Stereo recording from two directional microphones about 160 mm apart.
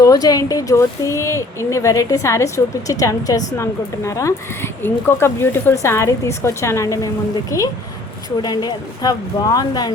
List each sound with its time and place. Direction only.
0.0 s speech: 25° left (ahead or behind)